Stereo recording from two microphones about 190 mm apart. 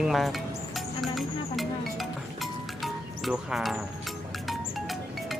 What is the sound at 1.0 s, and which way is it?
Music, centre (ahead or behind).